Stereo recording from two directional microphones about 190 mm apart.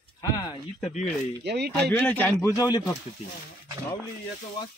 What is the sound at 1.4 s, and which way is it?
Speech, 60° right (ahead or behind).